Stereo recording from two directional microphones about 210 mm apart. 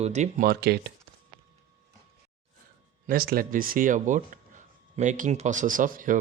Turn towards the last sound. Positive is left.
turn(degrees=-40)  # may be behind; listen again after turning